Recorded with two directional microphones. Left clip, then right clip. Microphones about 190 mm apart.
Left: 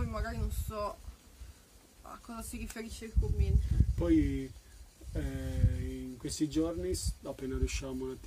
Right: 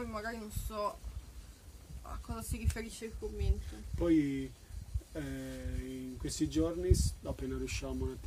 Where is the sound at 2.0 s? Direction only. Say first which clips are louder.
Even; 15° right (ahead or behind).